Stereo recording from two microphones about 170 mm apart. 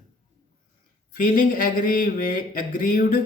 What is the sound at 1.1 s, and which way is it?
Speech, 55° left (ahead or behind).